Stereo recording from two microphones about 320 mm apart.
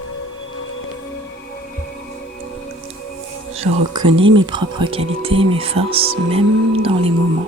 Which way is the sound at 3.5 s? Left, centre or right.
Centre.